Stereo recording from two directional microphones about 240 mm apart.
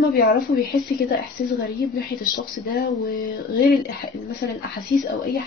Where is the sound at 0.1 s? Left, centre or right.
Left.